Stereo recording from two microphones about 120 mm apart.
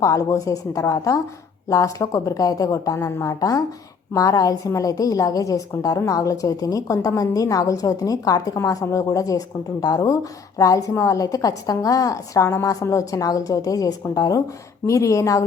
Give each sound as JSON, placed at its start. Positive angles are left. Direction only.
{"t": 0.0, "sound": "a woman's voice", "side_deg": 25}